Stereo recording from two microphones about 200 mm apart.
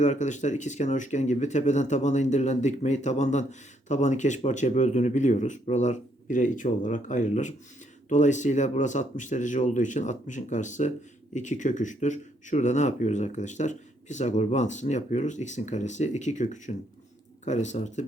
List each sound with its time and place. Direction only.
0.0 s speech: 35° left (ahead or behind)